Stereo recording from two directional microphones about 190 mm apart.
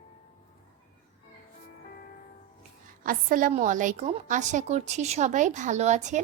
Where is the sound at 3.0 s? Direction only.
45° right (ahead or behind).